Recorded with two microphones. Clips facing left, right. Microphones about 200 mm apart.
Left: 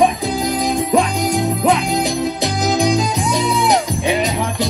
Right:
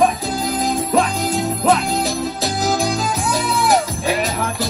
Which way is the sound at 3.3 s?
Centre (ahead or behind).